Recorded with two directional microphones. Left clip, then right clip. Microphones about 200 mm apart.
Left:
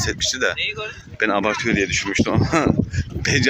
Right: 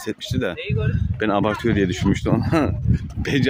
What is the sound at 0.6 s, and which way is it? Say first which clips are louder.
Speech: left 4 dB; 50° right (ahead or behind).